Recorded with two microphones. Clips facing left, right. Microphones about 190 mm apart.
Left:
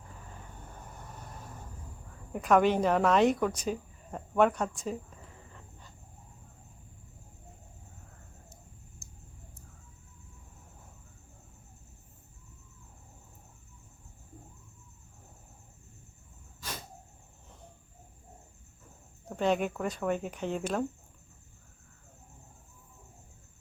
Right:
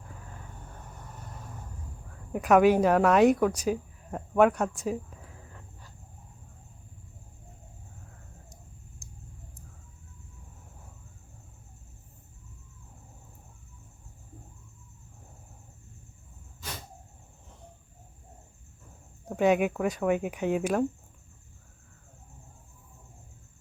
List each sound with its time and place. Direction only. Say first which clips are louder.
2.3 s speech: right 4 dB; 5° right (ahead or behind)
4.9 s a sound: right 4 dB; 5° right (ahead or behind)
9.0 s vehicle: right 4 dB; 15° right (ahead or behind)
19.4 s speech: right 5 dB; 10° right (ahead or behind)